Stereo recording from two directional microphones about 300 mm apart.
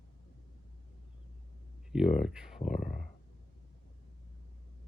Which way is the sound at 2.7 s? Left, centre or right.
Left.